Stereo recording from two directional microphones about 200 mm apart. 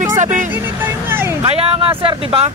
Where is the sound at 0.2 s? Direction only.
40° right (ahead or behind).